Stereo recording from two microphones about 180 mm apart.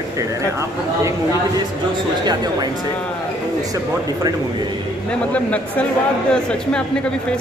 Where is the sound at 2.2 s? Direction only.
20° right (ahead or behind).